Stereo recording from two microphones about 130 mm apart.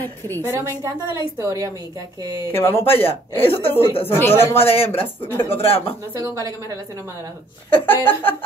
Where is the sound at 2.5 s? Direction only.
20° left (ahead or behind).